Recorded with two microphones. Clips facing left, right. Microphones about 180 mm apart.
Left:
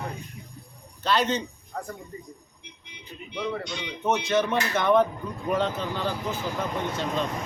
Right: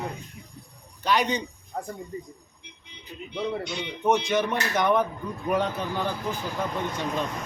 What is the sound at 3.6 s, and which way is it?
A man's voice, 15° right (ahead or behind).